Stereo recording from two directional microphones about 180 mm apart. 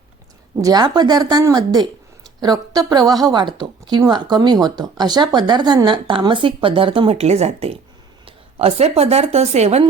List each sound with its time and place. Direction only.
0.6 s a woman's voice: 20° right (ahead or behind)